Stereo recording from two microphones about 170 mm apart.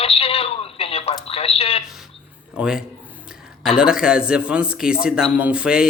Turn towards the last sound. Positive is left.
turn(degrees=-5)  # may be behind; listen again after turning